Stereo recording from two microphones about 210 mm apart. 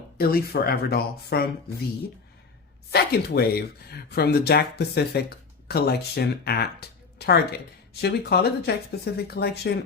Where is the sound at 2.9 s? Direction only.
50° left (ahead or behind).